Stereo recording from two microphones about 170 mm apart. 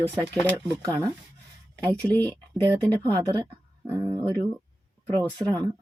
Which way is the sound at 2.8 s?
25° right (ahead or behind).